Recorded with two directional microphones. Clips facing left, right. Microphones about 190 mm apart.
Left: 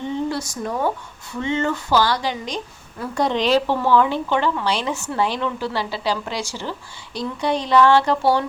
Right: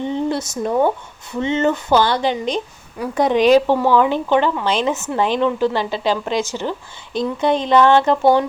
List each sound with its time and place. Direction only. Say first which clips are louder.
0.0 s speech: right 3 dB; 20° right (ahead or behind)